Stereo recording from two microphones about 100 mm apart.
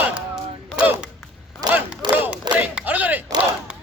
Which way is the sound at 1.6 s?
40° right (ahead or behind).